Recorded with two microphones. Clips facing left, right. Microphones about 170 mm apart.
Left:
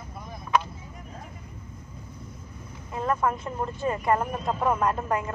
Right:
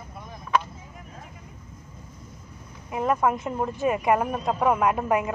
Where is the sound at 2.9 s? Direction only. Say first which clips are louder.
Right 3 dB; 20° right (ahead or behind).